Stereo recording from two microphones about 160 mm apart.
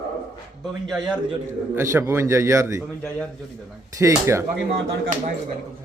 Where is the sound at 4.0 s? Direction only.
15° right (ahead or behind).